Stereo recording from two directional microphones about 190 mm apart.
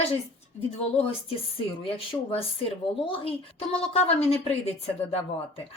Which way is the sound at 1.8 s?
30° left (ahead or behind).